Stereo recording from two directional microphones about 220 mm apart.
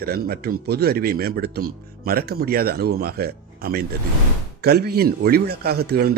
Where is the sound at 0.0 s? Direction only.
45° right (ahead or behind).